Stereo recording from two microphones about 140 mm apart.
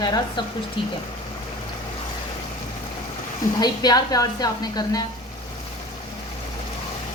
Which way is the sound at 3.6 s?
30° left (ahead or behind).